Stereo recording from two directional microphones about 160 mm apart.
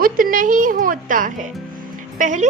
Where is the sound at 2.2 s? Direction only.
50° right (ahead or behind).